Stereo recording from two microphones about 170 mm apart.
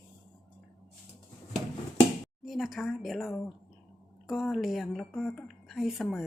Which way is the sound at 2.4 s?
Centre (ahead or behind).